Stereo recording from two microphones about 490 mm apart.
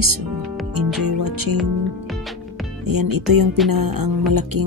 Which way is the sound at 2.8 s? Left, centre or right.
Right.